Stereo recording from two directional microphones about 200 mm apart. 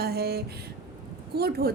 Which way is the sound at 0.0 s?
50° right (ahead or behind).